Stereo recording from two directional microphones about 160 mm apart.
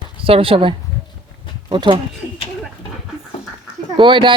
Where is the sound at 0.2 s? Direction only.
35° right (ahead or behind).